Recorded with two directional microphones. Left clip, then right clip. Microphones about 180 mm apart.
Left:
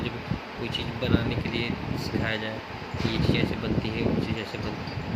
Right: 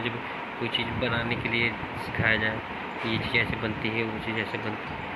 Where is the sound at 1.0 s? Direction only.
15° left (ahead or behind).